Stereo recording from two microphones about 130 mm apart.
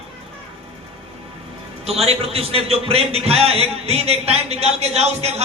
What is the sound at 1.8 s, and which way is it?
A man's voice, 50° right (ahead or behind).